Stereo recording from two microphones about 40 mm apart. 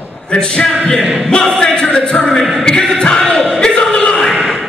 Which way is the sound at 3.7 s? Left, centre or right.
Left.